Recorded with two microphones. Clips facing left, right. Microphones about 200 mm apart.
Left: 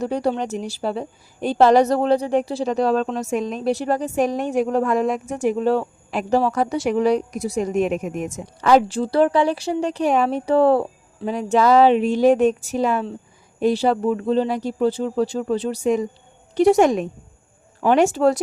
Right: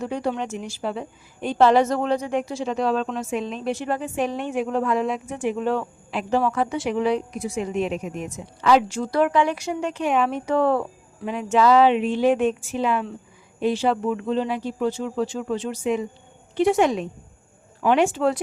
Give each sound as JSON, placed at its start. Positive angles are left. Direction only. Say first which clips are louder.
{"t": 0.0, "sound": "a woman's voice", "louder": "left 4 dB", "side_deg": 35}
{"t": 8.9, "sound": "a woman's voice", "louder": "left 4 dB", "side_deg": 30}